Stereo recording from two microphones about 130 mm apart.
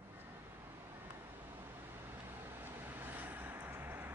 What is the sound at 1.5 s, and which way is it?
Vehicle, 20° right (ahead or behind).